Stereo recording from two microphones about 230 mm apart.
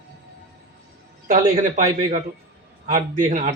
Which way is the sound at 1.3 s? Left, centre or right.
Right.